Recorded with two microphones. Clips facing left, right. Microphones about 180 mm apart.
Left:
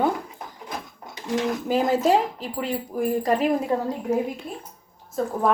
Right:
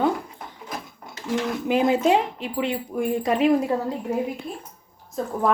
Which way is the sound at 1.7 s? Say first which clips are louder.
Right 1 dB; centre (ahead or behind).